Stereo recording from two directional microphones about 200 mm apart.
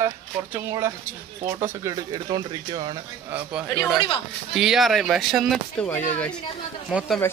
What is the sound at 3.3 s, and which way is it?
A man's voice, 5° right (ahead or behind).